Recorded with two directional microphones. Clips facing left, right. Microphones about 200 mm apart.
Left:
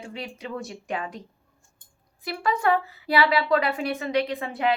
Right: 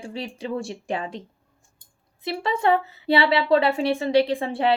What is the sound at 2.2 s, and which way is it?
A woman's voice, 25° right (ahead or behind).